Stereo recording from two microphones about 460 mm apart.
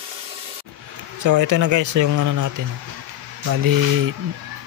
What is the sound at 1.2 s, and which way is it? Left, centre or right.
Speech, right.